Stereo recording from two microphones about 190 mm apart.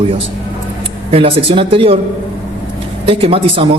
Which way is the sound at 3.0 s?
30° right (ahead or behind).